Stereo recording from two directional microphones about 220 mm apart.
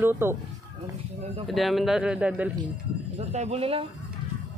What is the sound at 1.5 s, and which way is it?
Speech, centre (ahead or behind).